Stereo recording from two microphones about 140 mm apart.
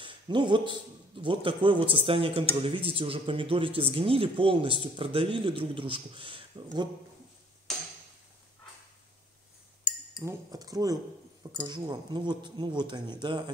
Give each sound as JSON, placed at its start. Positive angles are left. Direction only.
{"t": 0.0, "sound": "speech", "side_deg": -35}
{"t": 10.2, "sound": "speech", "side_deg": -25}